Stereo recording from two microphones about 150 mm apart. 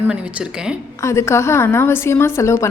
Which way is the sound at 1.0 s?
20° left (ahead or behind).